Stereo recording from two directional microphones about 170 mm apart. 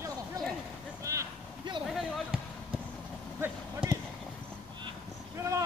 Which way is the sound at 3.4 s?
10° right (ahead or behind).